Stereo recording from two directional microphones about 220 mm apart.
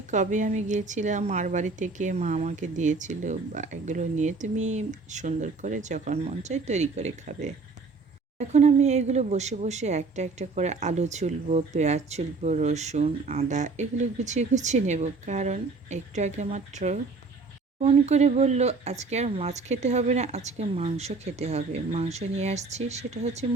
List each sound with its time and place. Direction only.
0.1 s speech: 35° right (ahead or behind)